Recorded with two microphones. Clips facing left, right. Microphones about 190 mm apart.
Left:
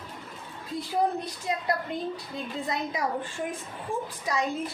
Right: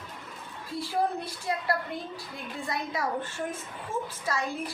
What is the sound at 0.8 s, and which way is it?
A woman's voice, 20° left (ahead or behind).